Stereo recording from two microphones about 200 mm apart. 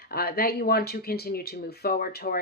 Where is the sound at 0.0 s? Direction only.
50° left (ahead or behind).